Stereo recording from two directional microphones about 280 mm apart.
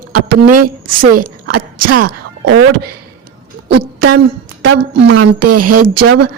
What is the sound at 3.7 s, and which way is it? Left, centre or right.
Speech, right.